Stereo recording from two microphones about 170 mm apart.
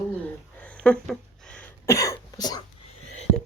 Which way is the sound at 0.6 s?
5° left (ahead or behind).